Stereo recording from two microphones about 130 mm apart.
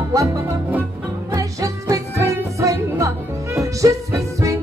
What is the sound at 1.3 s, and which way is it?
Music, 25° right (ahead or behind).